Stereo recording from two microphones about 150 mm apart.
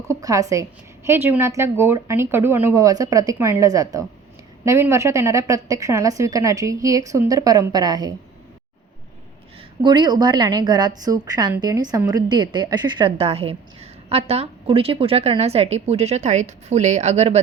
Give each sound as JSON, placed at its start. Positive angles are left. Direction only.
{"t": 0.1, "sound": "a woman's voice", "side_deg": -25}
{"t": 9.8, "sound": "a woman's voice", "side_deg": -30}